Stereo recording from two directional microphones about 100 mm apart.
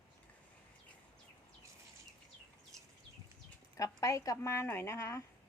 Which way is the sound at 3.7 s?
35° left (ahead or behind).